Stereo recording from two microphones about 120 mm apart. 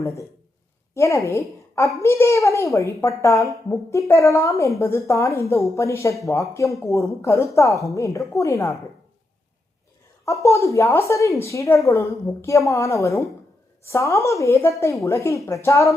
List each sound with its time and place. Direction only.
0.0 s a woman's voice: 25° left (ahead or behind)
10.2 s a woman's voice: 25° left (ahead or behind)